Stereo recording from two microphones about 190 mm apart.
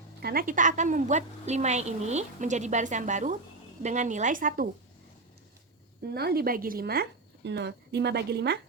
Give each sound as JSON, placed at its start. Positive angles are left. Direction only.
{"t": 0.2, "sound": "a woman's voice", "side_deg": -55}
{"t": 6.0, "sound": "speech", "side_deg": -55}